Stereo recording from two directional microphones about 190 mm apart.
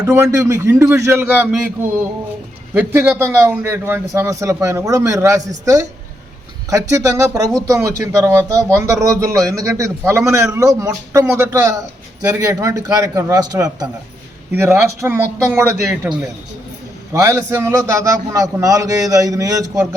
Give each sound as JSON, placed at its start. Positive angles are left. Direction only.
{"t": 0.0, "sound": "speech", "side_deg": -15}